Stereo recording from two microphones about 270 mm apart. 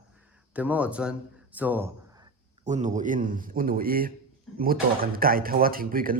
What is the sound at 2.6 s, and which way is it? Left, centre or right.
Speech, right.